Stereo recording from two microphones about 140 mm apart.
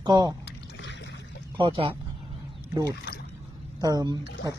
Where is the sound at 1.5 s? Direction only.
35° right (ahead or behind).